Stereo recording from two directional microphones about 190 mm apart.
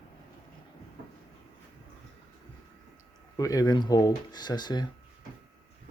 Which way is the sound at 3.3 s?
20° left (ahead or behind).